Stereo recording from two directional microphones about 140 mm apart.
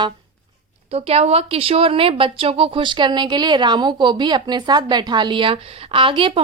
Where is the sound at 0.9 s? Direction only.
45° right (ahead or behind).